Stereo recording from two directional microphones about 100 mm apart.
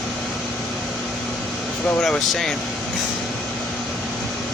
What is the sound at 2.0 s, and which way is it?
Speech, 5° left (ahead or behind).